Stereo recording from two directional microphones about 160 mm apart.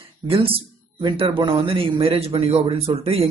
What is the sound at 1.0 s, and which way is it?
A man's voice, 30° right (ahead or behind).